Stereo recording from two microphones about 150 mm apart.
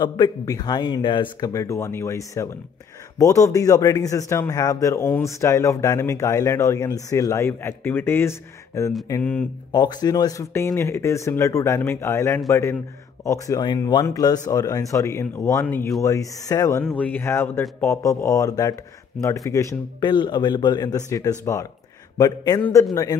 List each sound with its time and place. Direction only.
0.0 s a man's voice: 25° left (ahead or behind)
1.5 s a man's voice: 20° left (ahead or behind)
9.7 s a man's voice: 30° left (ahead or behind)